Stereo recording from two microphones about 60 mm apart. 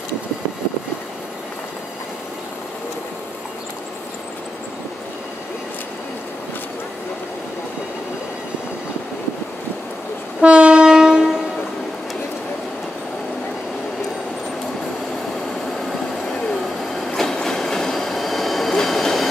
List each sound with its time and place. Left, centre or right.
10.4 s train: centre
17.0 s train: centre